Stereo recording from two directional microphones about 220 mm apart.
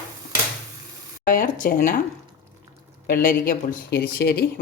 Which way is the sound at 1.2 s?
35° left (ahead or behind).